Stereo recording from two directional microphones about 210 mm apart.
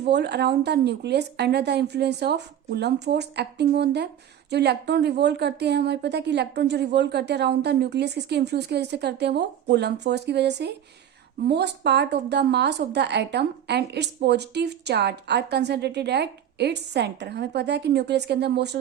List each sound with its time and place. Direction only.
0.0 s a woman's voice: 55° right (ahead or behind)